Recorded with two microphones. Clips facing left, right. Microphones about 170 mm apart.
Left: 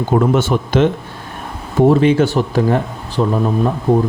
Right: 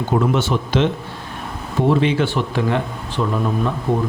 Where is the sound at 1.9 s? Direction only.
45° left (ahead or behind).